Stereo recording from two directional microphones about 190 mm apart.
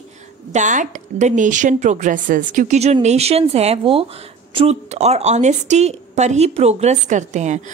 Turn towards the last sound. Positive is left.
turn(degrees=-40)  # may be behind; listen again after turning